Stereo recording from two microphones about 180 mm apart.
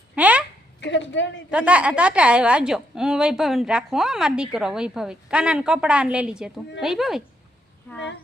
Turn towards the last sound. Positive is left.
turn(degrees=0)  # may be behind; listen again after turning